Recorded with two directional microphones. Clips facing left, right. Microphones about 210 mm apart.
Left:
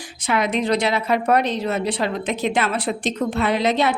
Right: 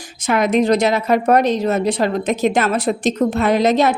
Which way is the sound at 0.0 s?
45° right (ahead or behind).